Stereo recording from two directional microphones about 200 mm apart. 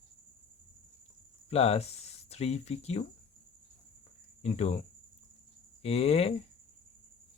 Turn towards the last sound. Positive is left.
turn(degrees=30)  # may be behind; listen again after turning